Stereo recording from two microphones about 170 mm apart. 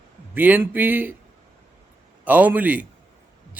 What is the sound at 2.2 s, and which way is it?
Speech, 10° right (ahead or behind).